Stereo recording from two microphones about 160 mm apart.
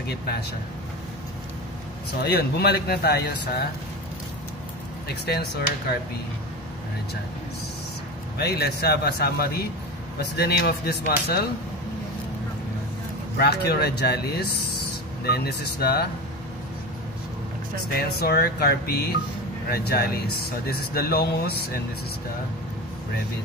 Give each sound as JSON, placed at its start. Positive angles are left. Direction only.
{"t": 2.2, "sound": "speech", "side_deg": 85}
{"t": 5.0, "sound": "speech", "side_deg": 85}
{"t": 8.4, "sound": "speech", "side_deg": 85}
{"t": 13.4, "sound": "speech", "side_deg": 90}
{"t": 18.2, "sound": "speech", "side_deg": 80}